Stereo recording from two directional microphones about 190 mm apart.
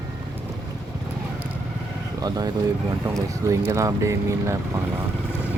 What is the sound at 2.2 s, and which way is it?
Speech, 20° right (ahead or behind).